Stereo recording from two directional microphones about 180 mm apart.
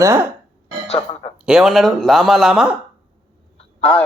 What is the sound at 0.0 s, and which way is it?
Speech, 15° right (ahead or behind).